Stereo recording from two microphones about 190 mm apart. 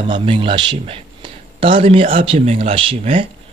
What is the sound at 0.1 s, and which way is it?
Speech, 30° right (ahead or behind).